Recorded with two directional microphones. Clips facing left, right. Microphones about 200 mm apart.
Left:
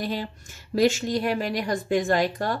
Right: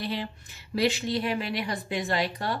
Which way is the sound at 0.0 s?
45° left (ahead or behind).